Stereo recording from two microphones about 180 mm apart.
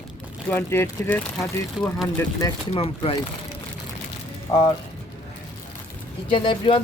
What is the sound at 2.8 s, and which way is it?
Speech, 35° left (ahead or behind).